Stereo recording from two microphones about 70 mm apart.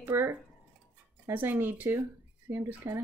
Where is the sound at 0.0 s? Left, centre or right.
Right.